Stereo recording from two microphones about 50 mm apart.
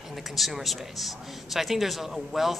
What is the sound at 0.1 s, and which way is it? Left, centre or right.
Speech, centre.